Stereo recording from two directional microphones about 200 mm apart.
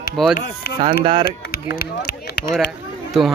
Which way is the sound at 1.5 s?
50° left (ahead or behind).